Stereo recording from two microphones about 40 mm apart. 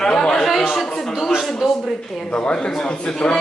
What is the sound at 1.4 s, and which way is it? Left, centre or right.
Speech, centre.